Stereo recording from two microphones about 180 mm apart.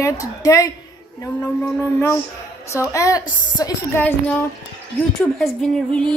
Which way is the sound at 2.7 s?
15° left (ahead or behind).